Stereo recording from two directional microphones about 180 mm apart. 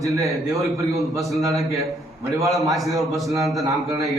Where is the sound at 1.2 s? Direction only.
Centre (ahead or behind).